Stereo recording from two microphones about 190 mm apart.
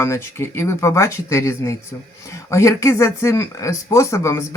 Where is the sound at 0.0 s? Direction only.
15° left (ahead or behind).